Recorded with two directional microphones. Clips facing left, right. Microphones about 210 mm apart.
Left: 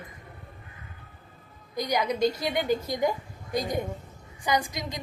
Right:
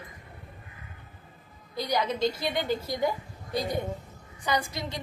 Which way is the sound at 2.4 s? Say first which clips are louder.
Left 2 dB; 15° left (ahead or behind).